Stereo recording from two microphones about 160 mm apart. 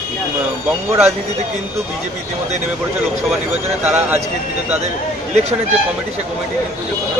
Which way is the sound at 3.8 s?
15° right (ahead or behind).